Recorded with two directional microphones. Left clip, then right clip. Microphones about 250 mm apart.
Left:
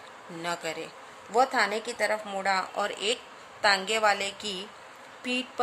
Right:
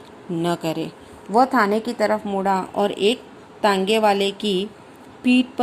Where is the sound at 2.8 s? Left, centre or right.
Centre.